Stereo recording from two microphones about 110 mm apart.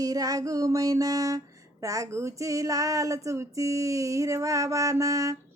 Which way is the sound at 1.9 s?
30° right (ahead or behind).